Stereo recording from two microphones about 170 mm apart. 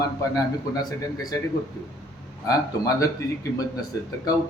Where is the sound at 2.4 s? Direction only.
20° left (ahead or behind).